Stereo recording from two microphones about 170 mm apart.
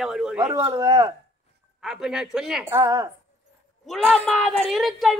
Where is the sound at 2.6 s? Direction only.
15° right (ahead or behind).